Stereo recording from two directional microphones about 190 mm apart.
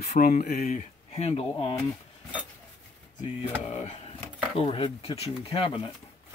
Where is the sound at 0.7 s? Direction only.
35° left (ahead or behind).